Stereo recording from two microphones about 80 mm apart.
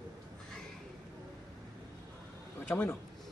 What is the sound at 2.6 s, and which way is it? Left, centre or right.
Speech, left.